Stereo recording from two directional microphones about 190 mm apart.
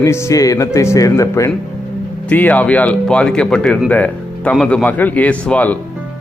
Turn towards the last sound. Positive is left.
turn(degrees=5)  # may be behind; listen again after turning